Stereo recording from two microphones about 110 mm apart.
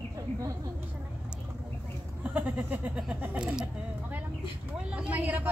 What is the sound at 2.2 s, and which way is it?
Speech, 15° right (ahead or behind).